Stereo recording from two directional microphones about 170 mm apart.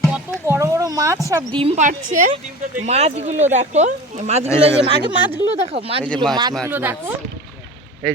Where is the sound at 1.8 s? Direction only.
50° right (ahead or behind).